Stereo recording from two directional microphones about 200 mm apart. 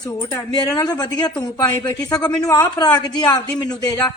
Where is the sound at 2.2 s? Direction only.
5° left (ahead or behind).